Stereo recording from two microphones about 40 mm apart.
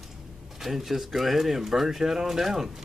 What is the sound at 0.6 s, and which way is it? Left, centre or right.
Speech, centre.